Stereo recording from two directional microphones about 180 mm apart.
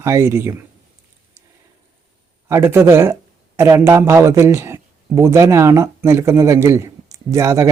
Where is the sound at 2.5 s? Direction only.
15° right (ahead or behind).